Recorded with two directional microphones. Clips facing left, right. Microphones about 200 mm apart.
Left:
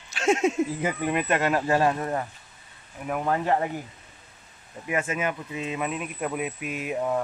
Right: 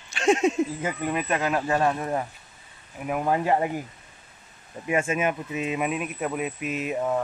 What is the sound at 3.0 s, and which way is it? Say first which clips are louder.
Speech: right 1 dB; 10° right (ahead or behind).